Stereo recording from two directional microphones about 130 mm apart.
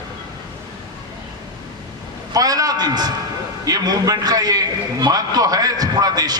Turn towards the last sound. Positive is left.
turn(degrees=-30)  # may be behind; listen again after turning